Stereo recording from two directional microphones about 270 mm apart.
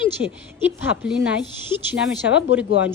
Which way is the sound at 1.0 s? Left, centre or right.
Centre.